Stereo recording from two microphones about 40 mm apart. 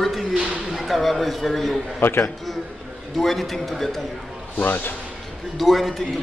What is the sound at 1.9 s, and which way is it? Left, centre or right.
Speech, left.